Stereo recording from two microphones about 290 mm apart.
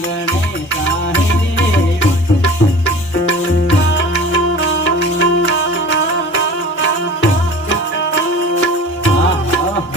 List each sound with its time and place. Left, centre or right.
1.1 s music: left